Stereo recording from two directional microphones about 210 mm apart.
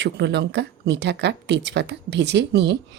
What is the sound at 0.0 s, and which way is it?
Speech, 55° right (ahead or behind).